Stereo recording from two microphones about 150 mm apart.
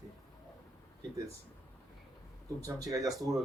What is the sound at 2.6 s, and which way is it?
Speech, 25° right (ahead or behind).